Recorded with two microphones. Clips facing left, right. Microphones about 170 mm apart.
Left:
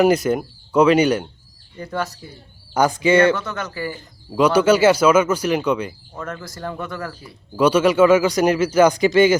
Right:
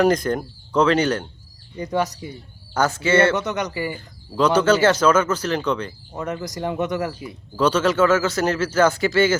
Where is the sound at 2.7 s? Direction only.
15° left (ahead or behind).